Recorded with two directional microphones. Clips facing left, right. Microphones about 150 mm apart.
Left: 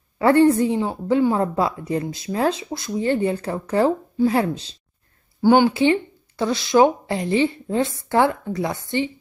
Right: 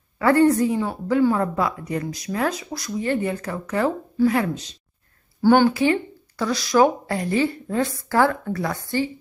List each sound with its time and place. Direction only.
0.2 s a woman's voice: 25° left (ahead or behind)
5.4 s a woman's voice: 15° left (ahead or behind)